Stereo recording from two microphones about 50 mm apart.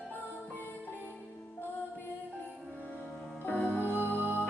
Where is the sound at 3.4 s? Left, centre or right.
Left.